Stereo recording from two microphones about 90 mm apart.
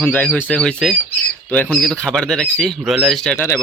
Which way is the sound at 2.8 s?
5° right (ahead or behind).